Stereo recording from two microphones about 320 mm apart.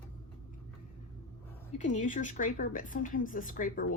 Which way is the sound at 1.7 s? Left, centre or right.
Left.